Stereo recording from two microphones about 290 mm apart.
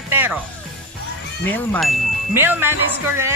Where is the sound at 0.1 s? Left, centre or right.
Centre.